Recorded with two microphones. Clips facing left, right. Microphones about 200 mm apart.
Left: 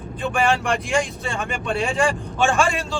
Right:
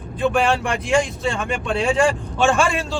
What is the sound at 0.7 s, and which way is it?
Speech, centre (ahead or behind).